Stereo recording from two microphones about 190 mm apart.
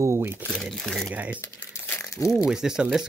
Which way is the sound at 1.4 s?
10° left (ahead or behind).